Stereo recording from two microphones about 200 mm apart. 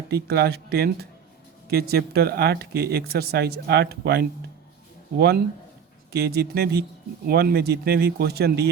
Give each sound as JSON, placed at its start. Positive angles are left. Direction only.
{"t": 0.1, "sound": "speech", "side_deg": -50}
{"t": 6.1, "sound": "speech", "side_deg": -55}